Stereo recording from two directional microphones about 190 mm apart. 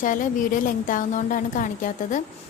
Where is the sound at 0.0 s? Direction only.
45° left (ahead or behind).